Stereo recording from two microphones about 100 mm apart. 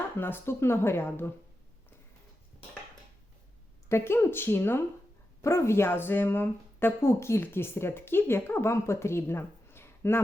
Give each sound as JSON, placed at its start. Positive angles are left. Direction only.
{"t": 0.2, "sound": "speech", "side_deg": 20}
{"t": 3.8, "sound": "speech", "side_deg": 25}